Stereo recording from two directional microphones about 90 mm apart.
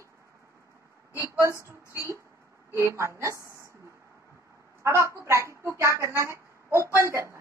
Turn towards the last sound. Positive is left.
turn(degrees=-30)  # may be behind; listen again after turning